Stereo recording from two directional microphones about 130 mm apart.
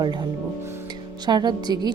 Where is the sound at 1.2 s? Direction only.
35° right (ahead or behind).